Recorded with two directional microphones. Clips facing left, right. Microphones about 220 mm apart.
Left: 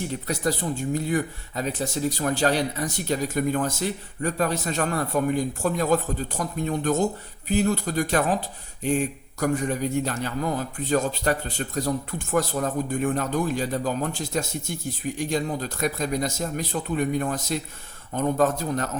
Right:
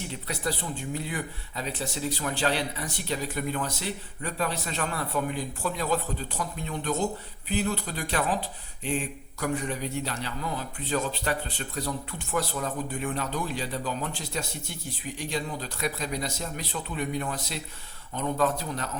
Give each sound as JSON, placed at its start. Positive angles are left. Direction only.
{"t": 0.3, "sound": "speech", "side_deg": 45}